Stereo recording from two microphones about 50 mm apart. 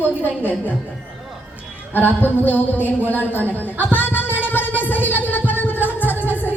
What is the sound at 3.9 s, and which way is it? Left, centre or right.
Music, left.